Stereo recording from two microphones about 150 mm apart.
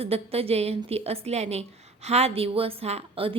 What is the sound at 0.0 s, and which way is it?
A woman's voice, 40° right (ahead or behind).